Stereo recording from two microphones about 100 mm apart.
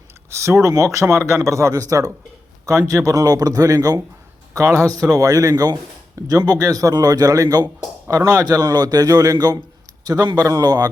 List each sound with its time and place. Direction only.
0.3 s speech: 30° right (ahead or behind)